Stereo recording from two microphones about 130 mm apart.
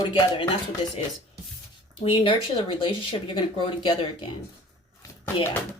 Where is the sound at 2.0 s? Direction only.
45° left (ahead or behind).